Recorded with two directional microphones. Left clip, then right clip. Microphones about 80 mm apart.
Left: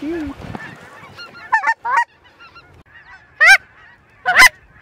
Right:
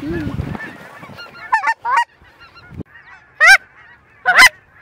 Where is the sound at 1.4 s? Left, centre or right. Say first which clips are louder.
Even; centre.